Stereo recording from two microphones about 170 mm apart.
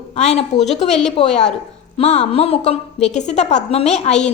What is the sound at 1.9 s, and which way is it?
A woman's voice, 35° left (ahead or behind).